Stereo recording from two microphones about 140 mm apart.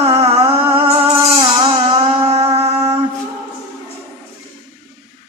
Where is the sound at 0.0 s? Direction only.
45° right (ahead or behind).